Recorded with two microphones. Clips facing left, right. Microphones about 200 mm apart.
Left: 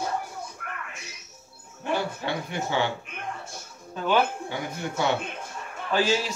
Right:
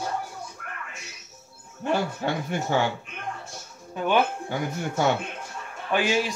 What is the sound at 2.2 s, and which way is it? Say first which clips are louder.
Speech: right 3 dB; 45° right (ahead or behind).